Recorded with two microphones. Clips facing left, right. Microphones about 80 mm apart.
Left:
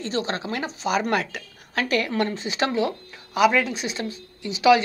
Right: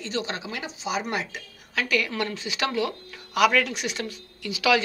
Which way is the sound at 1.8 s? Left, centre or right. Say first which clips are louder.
Left 3 dB; left.